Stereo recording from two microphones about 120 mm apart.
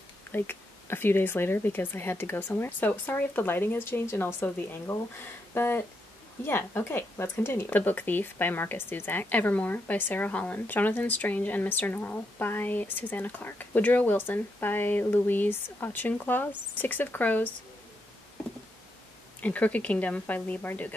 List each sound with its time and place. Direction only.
0.3 s a woman's voice: 15° left (ahead or behind)
19.4 s a woman's voice: 10° left (ahead or behind)